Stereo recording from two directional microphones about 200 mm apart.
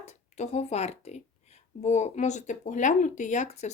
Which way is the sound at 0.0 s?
35° left (ahead or behind).